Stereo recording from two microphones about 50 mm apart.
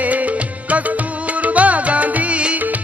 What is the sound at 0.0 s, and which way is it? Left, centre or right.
Music, right.